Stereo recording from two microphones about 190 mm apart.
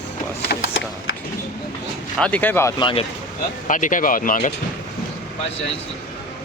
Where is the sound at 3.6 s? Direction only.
40° left (ahead or behind).